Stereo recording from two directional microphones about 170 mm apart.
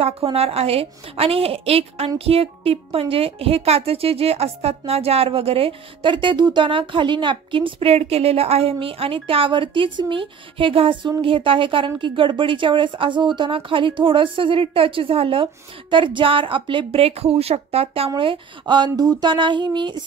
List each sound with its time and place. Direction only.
0.0 s a woman's voice: 35° right (ahead or behind)